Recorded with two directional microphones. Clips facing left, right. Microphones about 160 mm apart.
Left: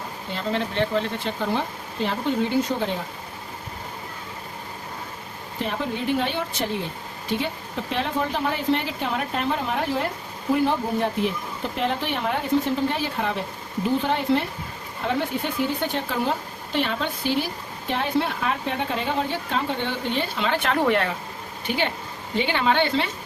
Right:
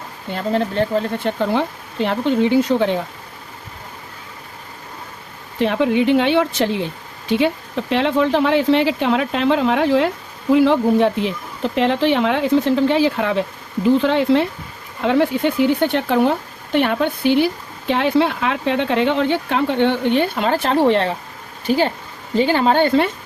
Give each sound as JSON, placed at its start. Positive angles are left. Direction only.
{"t": 0.3, "sound": "speech", "side_deg": -40}
{"t": 1.2, "sound": "speech", "side_deg": -65}
{"t": 5.5, "sound": "speech", "side_deg": -85}
{"t": 16.7, "sound": "speech", "side_deg": -60}